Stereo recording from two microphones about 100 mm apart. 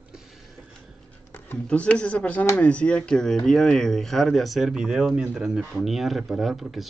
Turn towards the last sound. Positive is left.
turn(degrees=0)  # may be behind; listen again after turning